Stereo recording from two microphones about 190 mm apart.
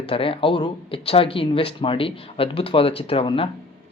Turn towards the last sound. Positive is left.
turn(degrees=30)  # may be behind; listen again after turning